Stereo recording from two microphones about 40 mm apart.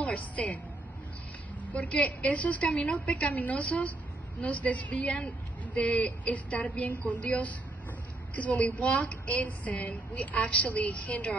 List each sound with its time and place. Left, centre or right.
0.0 s music: left
1.7 s a woman's voice: left